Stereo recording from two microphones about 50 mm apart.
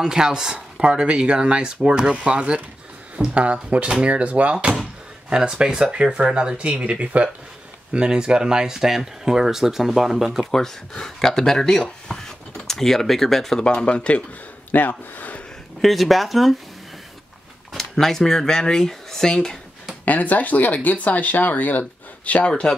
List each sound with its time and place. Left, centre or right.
0.0 s speech: centre
3.2 s speech: right
7.9 s speech: centre
10.4 s speech: centre
13.6 s speech: left
14.7 s speech: left
15.8 s speech: centre
17.7 s speech: centre
20.1 s speech: left
22.5 s speech: centre